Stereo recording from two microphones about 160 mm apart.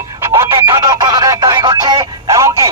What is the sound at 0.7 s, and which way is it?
Music, 25° right (ahead or behind).